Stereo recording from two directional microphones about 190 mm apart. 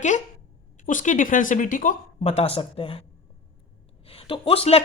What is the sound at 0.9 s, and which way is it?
Speech, 45° left (ahead or behind).